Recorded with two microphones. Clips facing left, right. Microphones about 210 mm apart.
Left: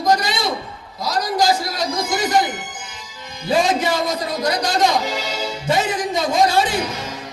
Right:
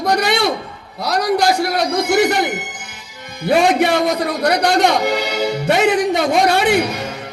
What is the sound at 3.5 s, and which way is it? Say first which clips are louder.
A man's voice: right 4 dB; 65° right (ahead or behind).